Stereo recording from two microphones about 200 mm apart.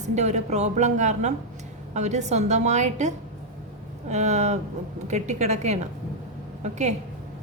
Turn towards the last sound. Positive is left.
turn(degrees=-35)  # may be behind; listen again after turning